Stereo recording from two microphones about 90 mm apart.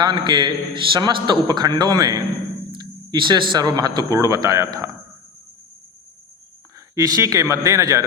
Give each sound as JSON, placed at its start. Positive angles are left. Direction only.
{"t": 0.0, "sound": "a man's voice", "side_deg": -55}
{"t": 2.7, "sound": "a man's voice", "side_deg": -55}
{"t": 6.9, "sound": "speech", "side_deg": -40}